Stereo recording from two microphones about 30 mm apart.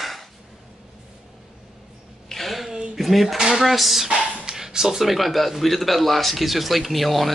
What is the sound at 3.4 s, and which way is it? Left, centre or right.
Speech, centre.